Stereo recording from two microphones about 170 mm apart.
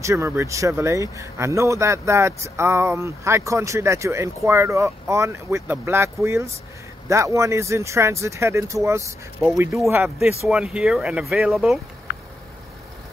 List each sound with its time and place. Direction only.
0.0 s speech: 15° right (ahead or behind)
12.1 s vehicle: 75° left (ahead or behind)